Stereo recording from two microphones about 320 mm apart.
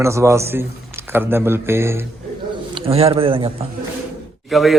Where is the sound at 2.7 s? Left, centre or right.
Centre.